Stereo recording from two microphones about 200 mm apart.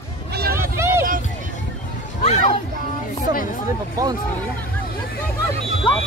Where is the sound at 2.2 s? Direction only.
35° left (ahead or behind).